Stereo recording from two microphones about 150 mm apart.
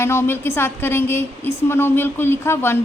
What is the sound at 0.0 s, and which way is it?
A woman's voice, 15° left (ahead or behind).